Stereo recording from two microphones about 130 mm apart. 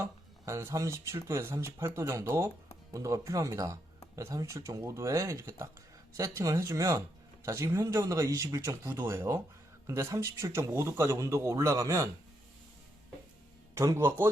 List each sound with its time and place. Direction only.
0.0 s speech: 20° right (ahead or behind)
13.7 s speech: 20° right (ahead or behind)